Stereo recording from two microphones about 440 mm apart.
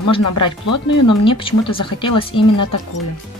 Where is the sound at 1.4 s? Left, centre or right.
Centre.